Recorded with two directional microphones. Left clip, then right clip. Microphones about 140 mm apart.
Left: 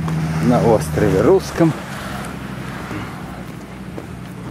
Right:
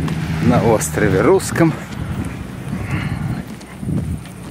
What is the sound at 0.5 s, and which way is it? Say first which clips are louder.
Speech: even; 20° right (ahead or behind).